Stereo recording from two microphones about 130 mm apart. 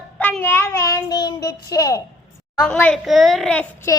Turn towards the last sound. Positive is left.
turn(degrees=10)  # may be behind; listen again after turning